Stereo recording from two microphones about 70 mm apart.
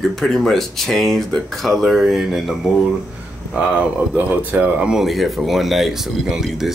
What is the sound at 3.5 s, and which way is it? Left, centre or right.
Speech, centre.